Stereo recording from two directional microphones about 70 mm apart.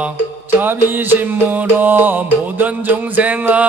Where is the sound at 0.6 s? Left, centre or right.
Right.